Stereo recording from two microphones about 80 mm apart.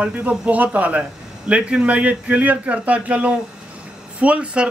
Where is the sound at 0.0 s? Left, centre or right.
Centre.